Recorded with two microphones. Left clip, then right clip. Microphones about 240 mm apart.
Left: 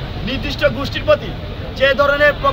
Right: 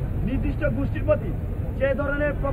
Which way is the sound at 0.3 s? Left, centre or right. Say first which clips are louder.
Left 11 dB; centre.